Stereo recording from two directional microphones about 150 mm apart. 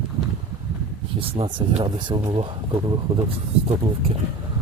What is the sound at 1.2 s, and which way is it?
Speech, 40° right (ahead or behind).